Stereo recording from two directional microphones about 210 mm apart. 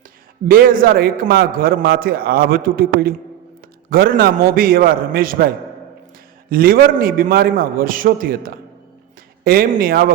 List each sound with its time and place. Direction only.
0.4 s a man's voice: 45° right (ahead or behind)
6.5 s a man's voice: 45° right (ahead or behind)